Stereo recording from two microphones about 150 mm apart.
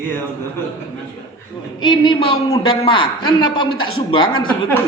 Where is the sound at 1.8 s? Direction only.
30° left (ahead or behind).